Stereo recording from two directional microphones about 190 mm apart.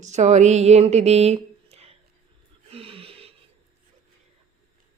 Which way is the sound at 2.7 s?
30° right (ahead or behind).